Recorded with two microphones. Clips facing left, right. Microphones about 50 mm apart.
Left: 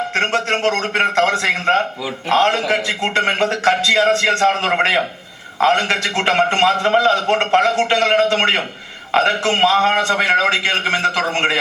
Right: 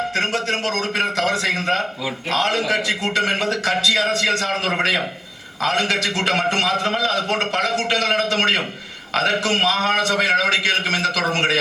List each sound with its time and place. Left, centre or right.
0.1 s a man's voice: left